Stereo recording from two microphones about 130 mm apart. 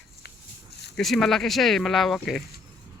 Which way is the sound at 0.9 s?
Centre (ahead or behind).